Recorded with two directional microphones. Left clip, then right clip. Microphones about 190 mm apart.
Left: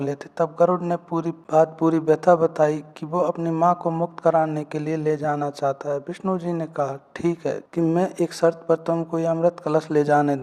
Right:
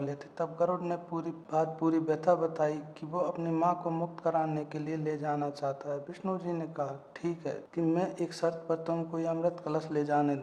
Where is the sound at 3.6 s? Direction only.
40° left (ahead or behind).